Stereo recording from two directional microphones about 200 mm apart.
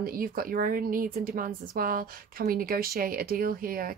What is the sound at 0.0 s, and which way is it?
Speech, 45° right (ahead or behind).